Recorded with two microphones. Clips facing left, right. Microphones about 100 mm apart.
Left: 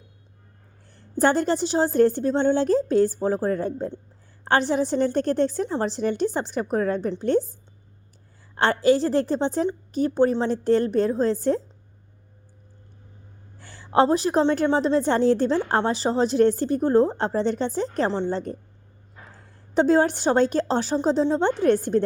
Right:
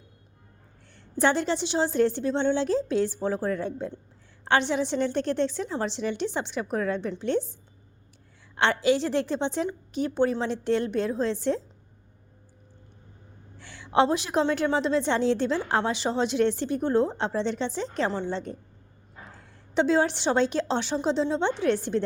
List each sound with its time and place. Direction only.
0.9 s a woman's voice: 45° left (ahead or behind)
8.5 s a woman's voice: 40° left (ahead or behind)
13.6 s a woman's voice: 40° left (ahead or behind)
19.7 s a woman's voice: 45° left (ahead or behind)